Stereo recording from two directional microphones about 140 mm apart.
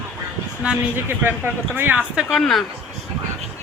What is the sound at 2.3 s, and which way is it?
Speech, 5° left (ahead or behind).